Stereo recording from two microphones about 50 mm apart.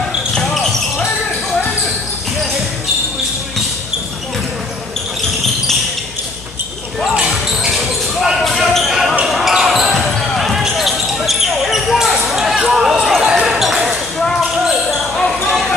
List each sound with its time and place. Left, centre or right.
0.3 s basketball bounce: centre
7.1 s basketball bounce: centre
12.3 s a sound: centre
13.2 s basketball bounce: centre